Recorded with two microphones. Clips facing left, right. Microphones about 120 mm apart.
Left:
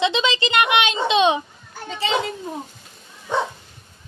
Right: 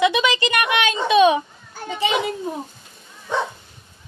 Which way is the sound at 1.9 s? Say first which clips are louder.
Right 2 dB; 15° right (ahead or behind).